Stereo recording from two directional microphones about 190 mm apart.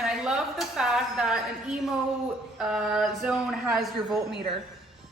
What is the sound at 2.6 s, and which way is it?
A woman's voice, 5° right (ahead or behind).